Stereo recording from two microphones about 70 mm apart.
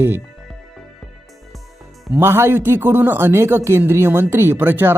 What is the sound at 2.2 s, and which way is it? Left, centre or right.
Speech, right.